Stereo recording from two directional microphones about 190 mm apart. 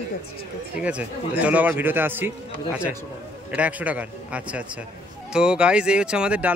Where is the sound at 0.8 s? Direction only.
5° right (ahead or behind).